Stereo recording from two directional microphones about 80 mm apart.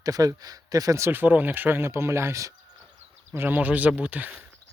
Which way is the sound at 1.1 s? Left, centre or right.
Right.